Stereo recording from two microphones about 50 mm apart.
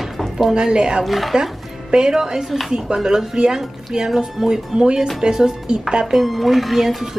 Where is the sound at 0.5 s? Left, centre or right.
Centre.